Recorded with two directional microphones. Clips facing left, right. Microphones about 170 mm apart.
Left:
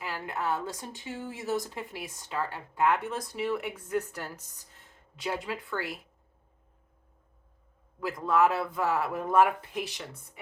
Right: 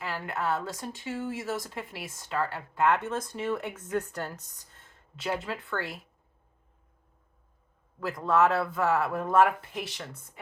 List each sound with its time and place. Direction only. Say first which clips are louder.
0.0 s speech: right 1 dB; 15° left (ahead or behind)
8.0 s speech: right 1 dB; 15° left (ahead or behind)